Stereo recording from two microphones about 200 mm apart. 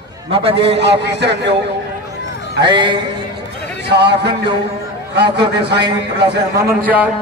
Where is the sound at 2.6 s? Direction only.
25° right (ahead or behind).